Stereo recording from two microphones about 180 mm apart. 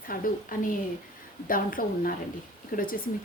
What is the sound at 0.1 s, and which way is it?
Speech, 50° left (ahead or behind).